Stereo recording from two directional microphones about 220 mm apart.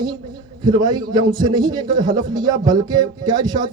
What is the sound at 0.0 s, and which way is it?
A man's voice, 20° right (ahead or behind).